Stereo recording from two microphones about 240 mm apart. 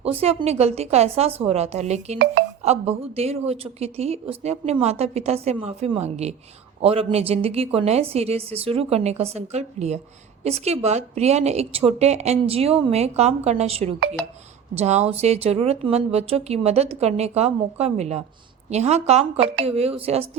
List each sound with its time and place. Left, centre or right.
0.0 s a woman's voice: right
2.1 s speech: right
2.6 s a woman's voice: right